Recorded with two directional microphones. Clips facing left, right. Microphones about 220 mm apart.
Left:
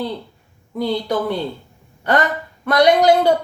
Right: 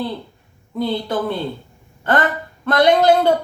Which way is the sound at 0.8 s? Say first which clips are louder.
Left 1 dB; 15° left (ahead or behind).